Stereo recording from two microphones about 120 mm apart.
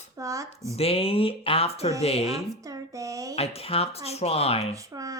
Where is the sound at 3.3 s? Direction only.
55° left (ahead or behind).